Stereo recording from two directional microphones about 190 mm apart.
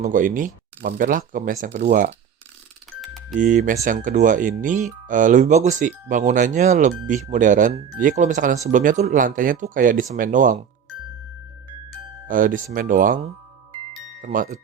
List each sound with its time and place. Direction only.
0.0 s speech: 45° right (ahead or behind)
3.0 s typing: centre (ahead or behind)
3.3 s speech: 40° right (ahead or behind)
12.3 s speech: 45° right (ahead or behind)
14.2 s speech: 45° right (ahead or behind)